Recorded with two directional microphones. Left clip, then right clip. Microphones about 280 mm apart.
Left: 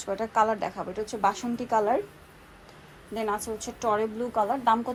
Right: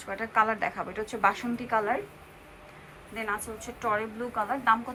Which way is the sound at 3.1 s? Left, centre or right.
Left.